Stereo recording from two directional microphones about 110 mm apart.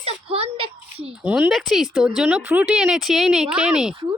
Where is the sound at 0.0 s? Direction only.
60° right (ahead or behind).